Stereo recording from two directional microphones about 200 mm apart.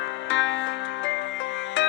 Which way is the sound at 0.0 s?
65° left (ahead or behind).